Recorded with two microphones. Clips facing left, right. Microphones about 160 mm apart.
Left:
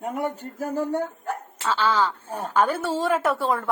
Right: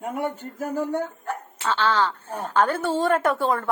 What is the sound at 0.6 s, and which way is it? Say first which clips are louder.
Speech: even; 30° left (ahead or behind).